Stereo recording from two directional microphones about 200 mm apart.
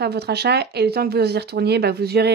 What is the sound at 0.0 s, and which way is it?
Speech, 55° right (ahead or behind).